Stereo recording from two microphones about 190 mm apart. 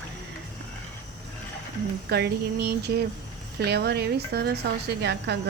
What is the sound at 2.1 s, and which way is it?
A woman's voice, 60° right (ahead or behind).